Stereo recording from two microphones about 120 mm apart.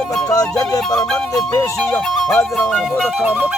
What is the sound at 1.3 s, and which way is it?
Music, 25° left (ahead or behind).